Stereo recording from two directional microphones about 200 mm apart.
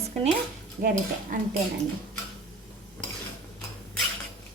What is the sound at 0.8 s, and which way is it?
Speech, 45° right (ahead or behind).